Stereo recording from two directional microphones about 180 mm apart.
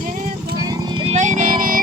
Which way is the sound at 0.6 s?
25° right (ahead or behind).